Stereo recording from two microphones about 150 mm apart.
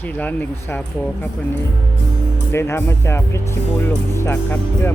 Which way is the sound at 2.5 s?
15° left (ahead or behind).